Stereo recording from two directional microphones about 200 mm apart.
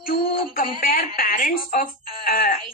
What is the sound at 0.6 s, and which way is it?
Speech, 45° left (ahead or behind).